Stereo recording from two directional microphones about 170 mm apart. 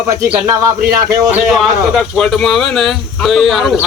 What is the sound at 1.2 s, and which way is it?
Speech, 10° right (ahead or behind).